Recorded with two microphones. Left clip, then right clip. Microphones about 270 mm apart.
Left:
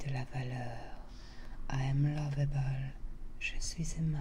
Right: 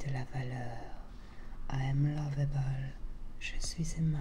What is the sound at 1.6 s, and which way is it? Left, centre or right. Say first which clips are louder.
Speech: even; centre.